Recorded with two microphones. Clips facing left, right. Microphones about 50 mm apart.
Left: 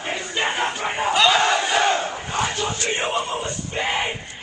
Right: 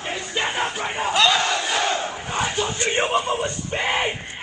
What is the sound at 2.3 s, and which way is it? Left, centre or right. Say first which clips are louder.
Crowd: even; centre.